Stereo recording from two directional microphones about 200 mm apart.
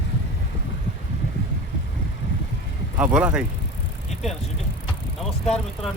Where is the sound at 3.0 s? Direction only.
5° right (ahead or behind).